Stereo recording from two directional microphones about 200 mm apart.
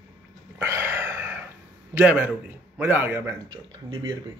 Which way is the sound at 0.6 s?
10° right (ahead or behind).